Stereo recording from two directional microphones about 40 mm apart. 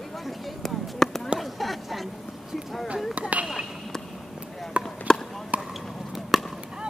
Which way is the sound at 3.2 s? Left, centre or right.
Right.